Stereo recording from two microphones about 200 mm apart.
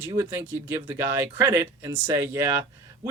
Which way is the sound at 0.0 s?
10° right (ahead or behind).